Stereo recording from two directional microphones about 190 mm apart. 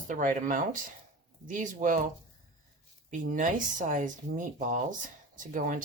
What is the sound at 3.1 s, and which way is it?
Speech, 45° right (ahead or behind).